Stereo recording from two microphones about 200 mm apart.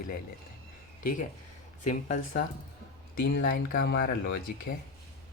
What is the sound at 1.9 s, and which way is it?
Speech, 40° left (ahead or behind).